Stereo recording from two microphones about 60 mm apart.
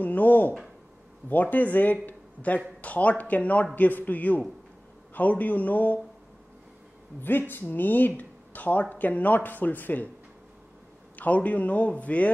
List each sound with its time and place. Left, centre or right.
0.0 s speech: left
7.2 s speech: left
11.1 s speech: left